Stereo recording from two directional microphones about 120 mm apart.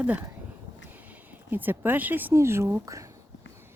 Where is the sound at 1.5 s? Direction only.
15° right (ahead or behind).